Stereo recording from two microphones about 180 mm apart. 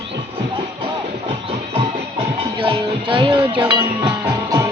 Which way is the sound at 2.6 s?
30° right (ahead or behind).